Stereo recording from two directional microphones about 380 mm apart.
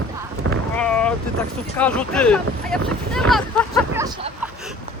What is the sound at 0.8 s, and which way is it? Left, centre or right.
Boat, centre.